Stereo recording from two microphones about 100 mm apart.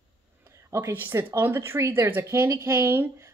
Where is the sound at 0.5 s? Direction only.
30° right (ahead or behind).